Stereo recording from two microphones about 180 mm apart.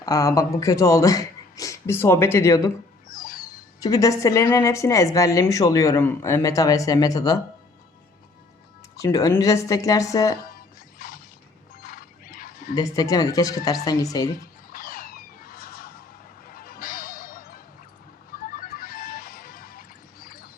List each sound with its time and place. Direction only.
0.0 s speech: 20° left (ahead or behind)
3.1 s a sound: 50° left (ahead or behind)
3.8 s speech: 20° left (ahead or behind)
9.0 s speech: 20° left (ahead or behind)
10.5 s music: 50° left (ahead or behind)
12.7 s speech: 20° left (ahead or behind)
14.7 s a sound: 55° left (ahead or behind)
16.5 s music: 55° left (ahead or behind)